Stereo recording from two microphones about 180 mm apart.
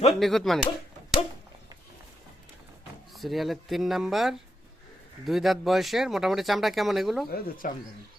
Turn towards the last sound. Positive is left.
turn(degrees=45)  # may be behind; listen again after turning